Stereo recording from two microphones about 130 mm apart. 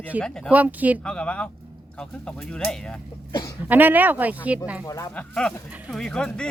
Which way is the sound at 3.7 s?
15° right (ahead or behind).